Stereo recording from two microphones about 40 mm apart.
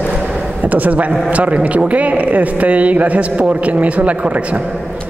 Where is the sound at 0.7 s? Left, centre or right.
Right.